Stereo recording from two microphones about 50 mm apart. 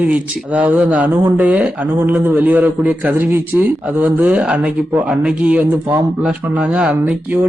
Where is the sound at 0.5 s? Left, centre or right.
Right.